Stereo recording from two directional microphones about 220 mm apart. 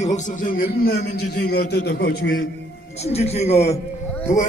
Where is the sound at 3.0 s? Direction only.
30° left (ahead or behind).